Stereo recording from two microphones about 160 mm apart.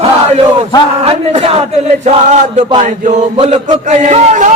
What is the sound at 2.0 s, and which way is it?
Speech, 45° right (ahead or behind).